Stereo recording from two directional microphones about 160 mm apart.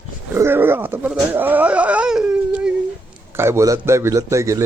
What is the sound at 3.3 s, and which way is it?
A man's voice, 15° right (ahead or behind).